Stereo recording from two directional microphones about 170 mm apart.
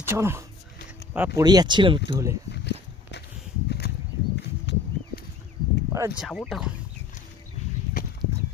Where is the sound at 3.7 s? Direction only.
75° left (ahead or behind).